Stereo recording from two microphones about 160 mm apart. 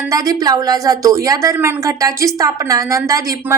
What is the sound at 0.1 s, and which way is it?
A woman's voice, 20° right (ahead or behind).